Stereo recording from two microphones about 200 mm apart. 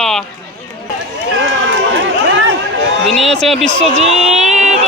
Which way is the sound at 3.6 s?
35° right (ahead or behind).